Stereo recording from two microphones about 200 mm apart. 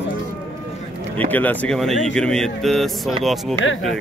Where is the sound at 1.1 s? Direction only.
10° left (ahead or behind).